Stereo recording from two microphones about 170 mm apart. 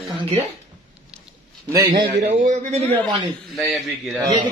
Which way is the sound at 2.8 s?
10° left (ahead or behind).